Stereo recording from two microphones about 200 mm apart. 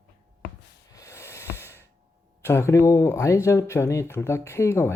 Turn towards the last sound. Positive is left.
turn(degrees=15)  # may be behind; listen again after turning